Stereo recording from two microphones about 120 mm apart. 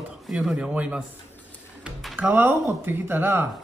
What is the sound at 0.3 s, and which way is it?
Speech, 5° right (ahead or behind).